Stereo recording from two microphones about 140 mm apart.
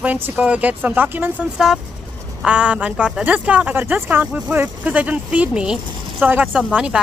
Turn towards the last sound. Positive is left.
turn(degrees=-5)  # may be behind; listen again after turning